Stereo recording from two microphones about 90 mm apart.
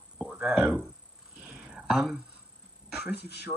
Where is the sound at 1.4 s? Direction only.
10° right (ahead or behind).